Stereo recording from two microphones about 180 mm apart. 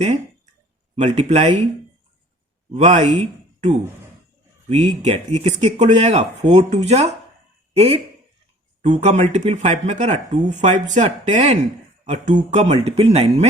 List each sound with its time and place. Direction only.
0.9 s speech: 35° right (ahead or behind)
2.7 s speech: 40° right (ahead or behind)
3.2 s a sound: 40° right (ahead or behind)
4.7 s speech: 35° right (ahead or behind)